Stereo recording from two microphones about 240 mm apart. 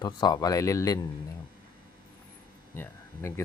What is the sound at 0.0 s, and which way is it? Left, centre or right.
Speech, centre.